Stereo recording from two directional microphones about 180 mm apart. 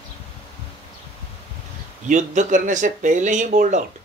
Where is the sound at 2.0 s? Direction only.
45° right (ahead or behind).